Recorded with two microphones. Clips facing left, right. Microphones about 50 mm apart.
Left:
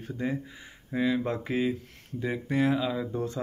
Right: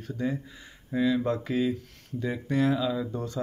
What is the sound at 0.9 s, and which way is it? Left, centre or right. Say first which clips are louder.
Speech: right 2 dB; left.